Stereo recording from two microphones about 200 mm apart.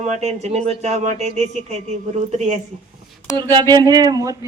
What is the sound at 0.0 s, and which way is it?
Speech, 35° right (ahead or behind).